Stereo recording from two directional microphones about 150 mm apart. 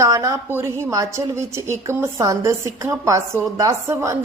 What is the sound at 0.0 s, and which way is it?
A woman's voice, 20° right (ahead or behind).